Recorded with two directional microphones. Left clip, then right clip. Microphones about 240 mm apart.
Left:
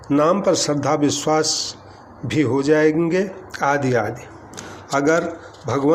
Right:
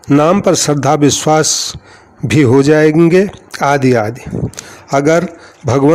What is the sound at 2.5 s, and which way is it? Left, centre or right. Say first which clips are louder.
A man's voice: right 7 dB; right.